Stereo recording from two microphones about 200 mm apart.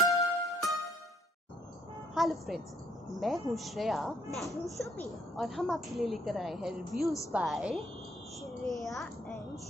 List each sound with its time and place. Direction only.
0.1 s music: 15° left (ahead or behind)
2.1 s speech: centre (ahead or behind)